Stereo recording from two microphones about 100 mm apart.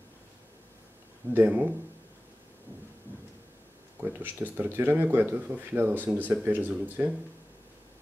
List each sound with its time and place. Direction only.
1.3 s speech: 20° right (ahead or behind)
4.0 s speech: 20° right (ahead or behind)